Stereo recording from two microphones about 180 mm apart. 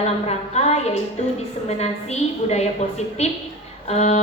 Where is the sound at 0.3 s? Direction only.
35° left (ahead or behind).